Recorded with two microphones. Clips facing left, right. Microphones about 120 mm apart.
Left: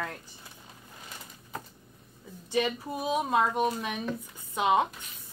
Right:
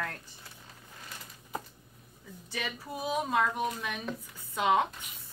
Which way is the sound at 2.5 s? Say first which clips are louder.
Left 9 dB; 20° left (ahead or behind).